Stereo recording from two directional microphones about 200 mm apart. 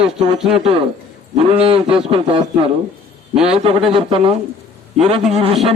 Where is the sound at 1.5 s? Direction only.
30° right (ahead or behind).